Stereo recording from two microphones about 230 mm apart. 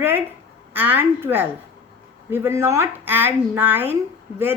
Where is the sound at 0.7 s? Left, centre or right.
Centre.